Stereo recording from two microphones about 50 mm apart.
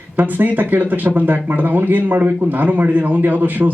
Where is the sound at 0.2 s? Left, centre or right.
Right.